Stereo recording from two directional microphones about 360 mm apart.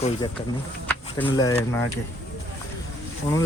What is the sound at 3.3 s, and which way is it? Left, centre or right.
Speech, centre.